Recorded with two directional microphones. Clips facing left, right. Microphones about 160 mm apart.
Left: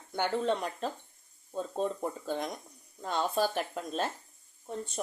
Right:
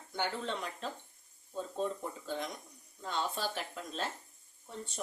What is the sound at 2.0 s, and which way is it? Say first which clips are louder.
Speech: left 5 dB; 50° left (ahead or behind).